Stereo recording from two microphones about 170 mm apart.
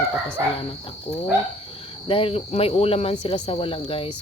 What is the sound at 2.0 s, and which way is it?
Speech, 35° left (ahead or behind).